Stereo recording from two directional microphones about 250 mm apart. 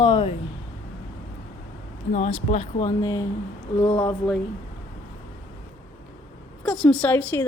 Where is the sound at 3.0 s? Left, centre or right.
Centre.